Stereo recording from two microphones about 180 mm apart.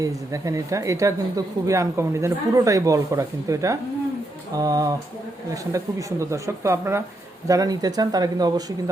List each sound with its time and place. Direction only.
0.0 s speech: 20° right (ahead or behind)